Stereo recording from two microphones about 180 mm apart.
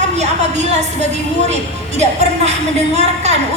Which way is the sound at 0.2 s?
40° right (ahead or behind).